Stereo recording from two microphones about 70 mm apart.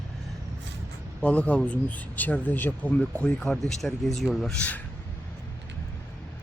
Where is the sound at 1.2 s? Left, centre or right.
Centre.